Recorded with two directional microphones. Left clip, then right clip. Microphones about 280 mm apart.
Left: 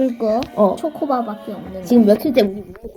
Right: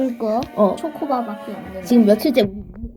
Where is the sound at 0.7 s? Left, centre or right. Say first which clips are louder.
Left 2 dB; left.